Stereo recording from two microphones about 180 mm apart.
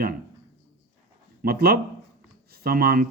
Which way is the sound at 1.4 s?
60° right (ahead or behind).